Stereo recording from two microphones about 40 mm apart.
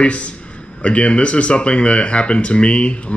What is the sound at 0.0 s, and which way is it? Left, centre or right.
Speech, left.